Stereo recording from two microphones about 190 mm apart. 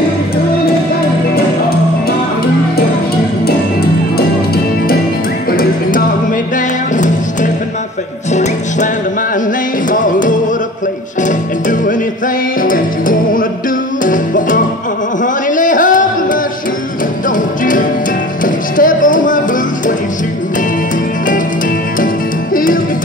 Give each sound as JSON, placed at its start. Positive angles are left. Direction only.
{"t": 5.5, "sound": "music", "side_deg": 50}
{"t": 8.3, "sound": "music", "side_deg": 40}
{"t": 9.8, "sound": "music", "side_deg": 45}
{"t": 15.2, "sound": "a sound", "side_deg": 45}
{"t": 18.4, "sound": "music", "side_deg": 45}
{"t": 22.0, "sound": "music", "side_deg": 45}